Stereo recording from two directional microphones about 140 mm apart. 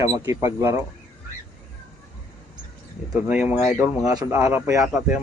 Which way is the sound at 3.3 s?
10° right (ahead or behind).